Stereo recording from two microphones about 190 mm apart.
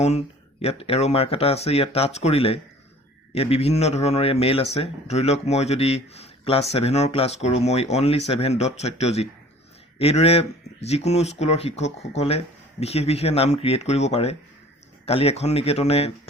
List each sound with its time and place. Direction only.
0.6 s speech: 30° left (ahead or behind)